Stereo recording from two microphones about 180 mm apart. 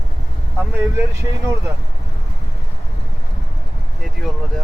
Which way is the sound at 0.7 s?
15° right (ahead or behind).